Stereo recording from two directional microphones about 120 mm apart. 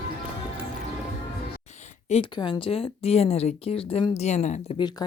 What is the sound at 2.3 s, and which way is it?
Speech, 40° left (ahead or behind).